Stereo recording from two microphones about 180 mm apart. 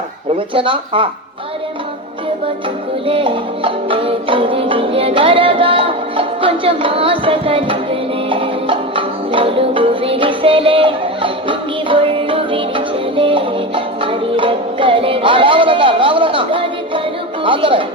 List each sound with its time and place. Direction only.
0.3 s speech: 30° right (ahead or behind)
3.1 s music: 30° right (ahead or behind)
17.4 s speech: 30° right (ahead or behind)